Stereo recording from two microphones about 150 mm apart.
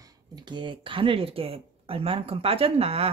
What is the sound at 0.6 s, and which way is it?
Speech, 35° right (ahead or behind).